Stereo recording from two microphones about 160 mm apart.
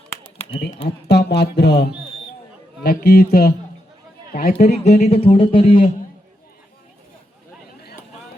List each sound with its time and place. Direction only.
0.9 s speech: 90° left
2.8 s a man's voice: 70° left (ahead or behind)
4.7 s speech: 45° left (ahead or behind)